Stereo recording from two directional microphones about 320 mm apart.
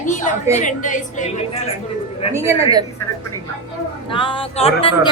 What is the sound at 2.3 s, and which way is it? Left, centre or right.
Speech, centre.